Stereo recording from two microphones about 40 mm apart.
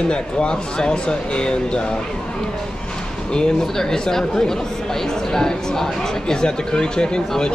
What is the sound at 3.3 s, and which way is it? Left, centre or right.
Speech, centre.